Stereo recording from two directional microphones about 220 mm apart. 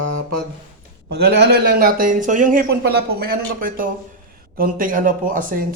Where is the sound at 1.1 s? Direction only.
50° right (ahead or behind).